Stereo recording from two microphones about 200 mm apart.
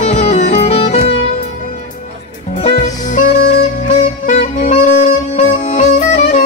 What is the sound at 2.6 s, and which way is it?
Music, 40° left (ahead or behind).